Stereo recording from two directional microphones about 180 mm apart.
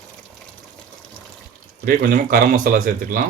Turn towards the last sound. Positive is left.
turn(degrees=-50)  # may be behind; listen again after turning